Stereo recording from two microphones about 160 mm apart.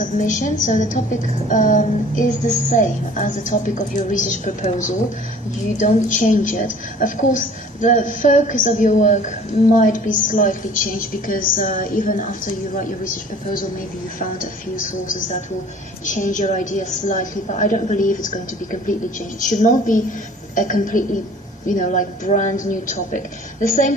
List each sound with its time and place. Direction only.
0.0 s a woman's voice: 55° left (ahead or behind)
14.2 s a woman's voice: 60° left (ahead or behind)